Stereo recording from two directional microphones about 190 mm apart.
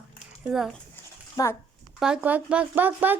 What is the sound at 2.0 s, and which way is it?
Speech, 5° right (ahead or behind).